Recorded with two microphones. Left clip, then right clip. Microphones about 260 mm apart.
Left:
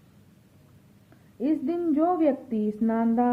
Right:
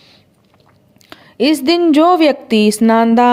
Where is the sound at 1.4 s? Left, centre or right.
Right.